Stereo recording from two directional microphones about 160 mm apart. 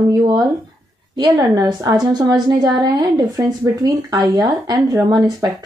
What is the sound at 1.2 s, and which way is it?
A woman's voice, 25° right (ahead or behind).